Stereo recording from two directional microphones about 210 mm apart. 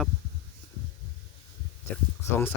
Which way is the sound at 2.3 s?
10° left (ahead or behind).